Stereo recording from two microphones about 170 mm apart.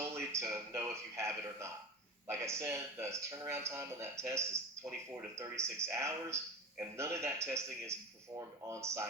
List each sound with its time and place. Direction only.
0.1 s speech: 15° right (ahead or behind)